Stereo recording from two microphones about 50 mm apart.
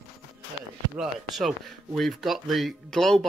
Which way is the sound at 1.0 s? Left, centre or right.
Centre.